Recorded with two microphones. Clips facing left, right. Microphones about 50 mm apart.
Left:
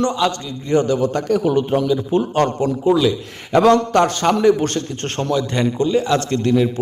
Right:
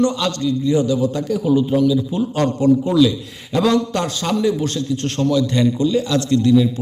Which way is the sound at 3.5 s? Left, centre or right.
Left.